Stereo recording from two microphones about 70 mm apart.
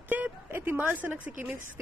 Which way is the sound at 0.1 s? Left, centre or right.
Right.